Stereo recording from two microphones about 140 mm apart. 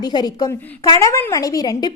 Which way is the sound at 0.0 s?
30° left (ahead or behind).